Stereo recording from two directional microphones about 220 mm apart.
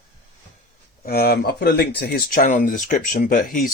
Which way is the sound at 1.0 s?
45° left (ahead or behind).